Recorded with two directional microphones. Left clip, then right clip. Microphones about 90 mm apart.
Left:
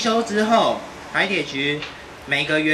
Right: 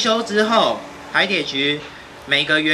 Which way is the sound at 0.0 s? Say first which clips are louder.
Right 2 dB; 35° right (ahead or behind).